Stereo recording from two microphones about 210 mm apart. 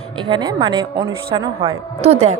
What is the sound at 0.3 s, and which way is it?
A woman's voice, 20° right (ahead or behind).